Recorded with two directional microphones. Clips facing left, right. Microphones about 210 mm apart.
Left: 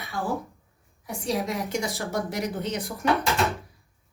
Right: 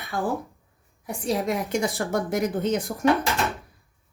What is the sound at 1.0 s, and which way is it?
A woman's voice, 55° right (ahead or behind).